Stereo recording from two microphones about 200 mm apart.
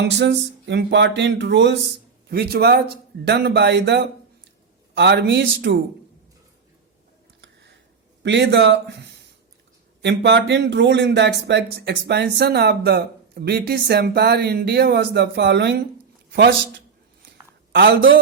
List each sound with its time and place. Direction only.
0.0 s speech: 60° right (ahead or behind)
8.2 s speech: 60° right (ahead or behind)
17.7 s a man's voice: 60° right (ahead or behind)